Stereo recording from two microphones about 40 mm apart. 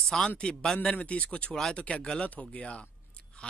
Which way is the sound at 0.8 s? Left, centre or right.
Left.